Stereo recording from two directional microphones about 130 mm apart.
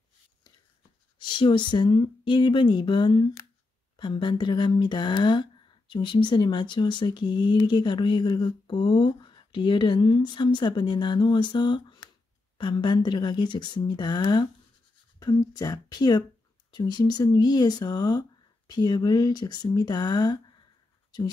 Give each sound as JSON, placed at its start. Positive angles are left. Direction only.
{"t": 1.2, "sound": "speech", "side_deg": 35}